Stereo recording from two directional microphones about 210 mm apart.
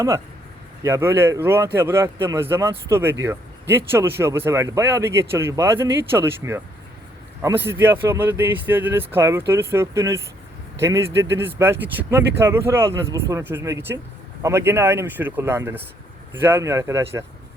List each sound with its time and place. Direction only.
0.8 s a man's voice: 15° right (ahead or behind)